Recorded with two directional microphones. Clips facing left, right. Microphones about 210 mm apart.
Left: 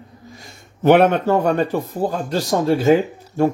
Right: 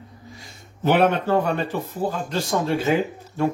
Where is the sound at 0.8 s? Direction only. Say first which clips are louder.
Left 5 dB; 55° left (ahead or behind).